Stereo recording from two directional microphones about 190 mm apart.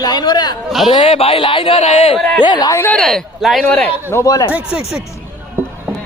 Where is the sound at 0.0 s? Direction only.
20° left (ahead or behind).